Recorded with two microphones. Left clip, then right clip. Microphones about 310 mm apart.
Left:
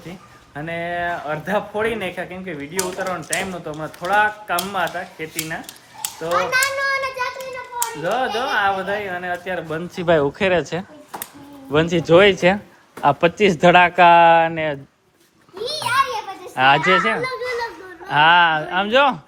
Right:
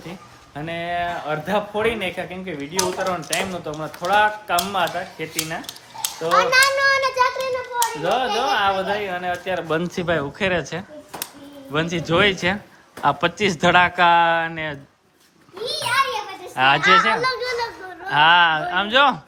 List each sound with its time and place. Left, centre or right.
0.5 s speech: centre
6.3 s children playing: right
8.0 s speech: centre
9.6 s speech: right
10.1 s speech: centre
15.5 s a sound: centre
16.6 s speech: centre
17.2 s children playing: centre
18.1 s speech: centre